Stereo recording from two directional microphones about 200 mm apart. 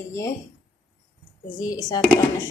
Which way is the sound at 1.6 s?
20° left (ahead or behind).